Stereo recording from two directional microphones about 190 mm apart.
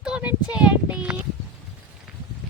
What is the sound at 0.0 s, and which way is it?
Child singing, 5° right (ahead or behind).